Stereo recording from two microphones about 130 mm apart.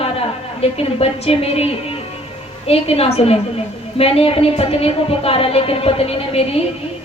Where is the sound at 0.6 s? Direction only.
50° left (ahead or behind).